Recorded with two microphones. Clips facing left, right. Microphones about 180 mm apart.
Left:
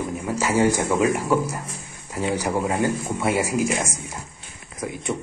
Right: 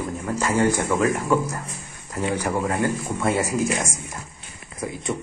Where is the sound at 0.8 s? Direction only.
25° left (ahead or behind).